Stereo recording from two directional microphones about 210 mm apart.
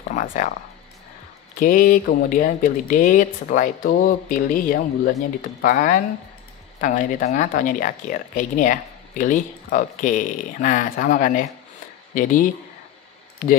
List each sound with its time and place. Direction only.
0.1 s speech: 35° left (ahead or behind)
1.6 s speech: 40° left (ahead or behind)